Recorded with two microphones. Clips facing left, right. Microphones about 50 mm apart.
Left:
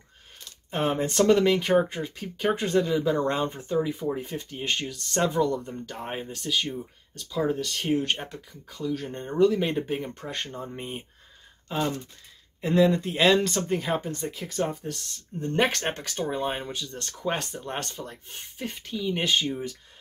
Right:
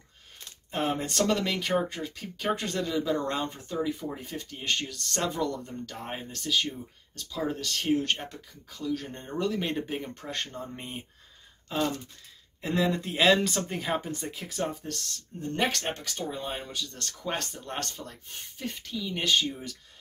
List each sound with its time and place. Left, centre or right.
0.7 s speech: left; by 11.9 s centre
12.6 s speech: centre
15.4 s speech: left
15.9 s speech: left
16.5 s speech: left
16.8 s speech: centre